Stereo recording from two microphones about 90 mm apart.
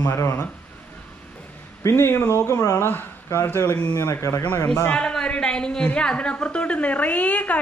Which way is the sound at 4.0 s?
35° left (ahead or behind).